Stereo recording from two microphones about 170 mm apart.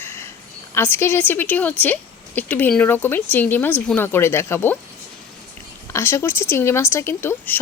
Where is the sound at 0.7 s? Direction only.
15° left (ahead or behind).